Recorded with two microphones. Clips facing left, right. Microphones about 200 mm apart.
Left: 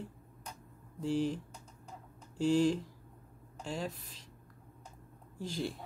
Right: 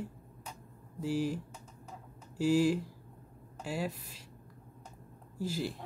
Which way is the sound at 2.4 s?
5° right (ahead or behind).